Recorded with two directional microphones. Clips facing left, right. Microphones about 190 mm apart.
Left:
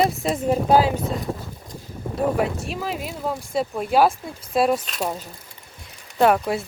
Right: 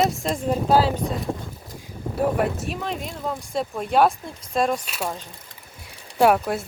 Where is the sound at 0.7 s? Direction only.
15° left (ahead or behind).